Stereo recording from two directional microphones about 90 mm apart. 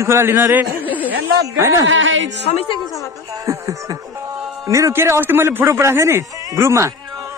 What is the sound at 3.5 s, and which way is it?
Music, 40° right (ahead or behind).